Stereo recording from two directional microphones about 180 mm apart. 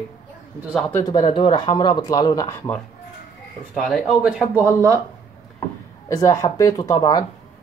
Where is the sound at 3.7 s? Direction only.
Centre (ahead or behind).